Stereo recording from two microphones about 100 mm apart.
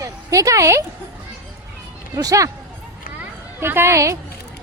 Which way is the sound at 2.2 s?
35° right (ahead or behind).